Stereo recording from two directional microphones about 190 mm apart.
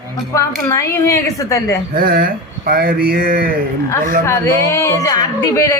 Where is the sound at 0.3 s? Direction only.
15° left (ahead or behind).